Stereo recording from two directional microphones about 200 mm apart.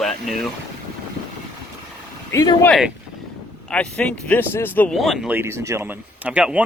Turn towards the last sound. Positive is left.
turn(degrees=-5)  # may be behind; listen again after turning